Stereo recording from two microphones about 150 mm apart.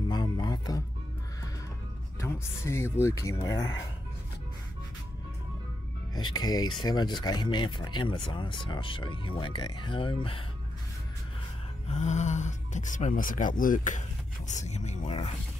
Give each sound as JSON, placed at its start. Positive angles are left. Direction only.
{"t": 0.1, "sound": "music", "side_deg": 30}
{"t": 2.1, "sound": "speech", "side_deg": 15}
{"t": 6.1, "sound": "speech", "side_deg": 25}
{"t": 11.9, "sound": "speech", "side_deg": 50}
{"t": 14.5, "sound": "speech", "side_deg": 50}